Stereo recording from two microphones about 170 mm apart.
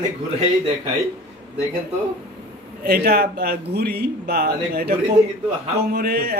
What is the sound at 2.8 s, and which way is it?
Speech, 65° right (ahead or behind).